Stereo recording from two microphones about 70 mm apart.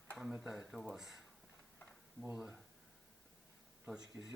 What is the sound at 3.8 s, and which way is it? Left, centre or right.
Speech, centre.